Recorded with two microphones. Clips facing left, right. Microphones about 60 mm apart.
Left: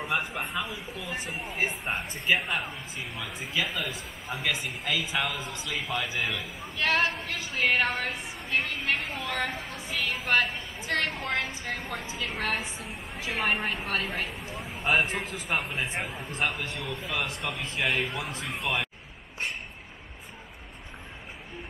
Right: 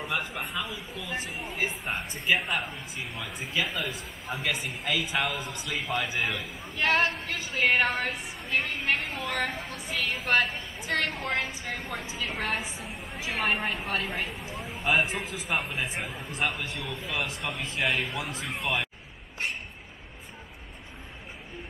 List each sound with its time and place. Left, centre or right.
0.0 s speech: centre
6.8 s a woman's voice: centre
7.1 s speech: centre